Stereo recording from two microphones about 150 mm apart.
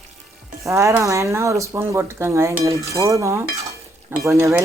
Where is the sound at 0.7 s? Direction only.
20° right (ahead or behind).